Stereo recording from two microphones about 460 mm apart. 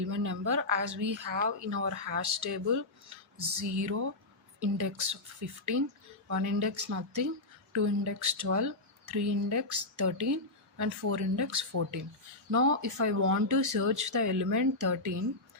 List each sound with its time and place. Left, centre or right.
0.1 s a woman's voice: right